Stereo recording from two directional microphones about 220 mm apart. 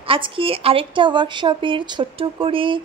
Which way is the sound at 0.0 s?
25° right (ahead or behind).